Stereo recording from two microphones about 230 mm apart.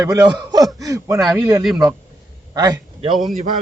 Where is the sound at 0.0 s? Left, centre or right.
Centre.